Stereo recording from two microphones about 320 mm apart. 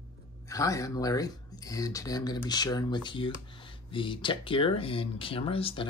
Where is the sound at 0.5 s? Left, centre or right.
Centre.